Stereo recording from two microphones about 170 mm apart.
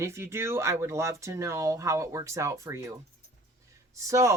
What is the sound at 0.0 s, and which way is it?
Speech, 15° right (ahead or behind).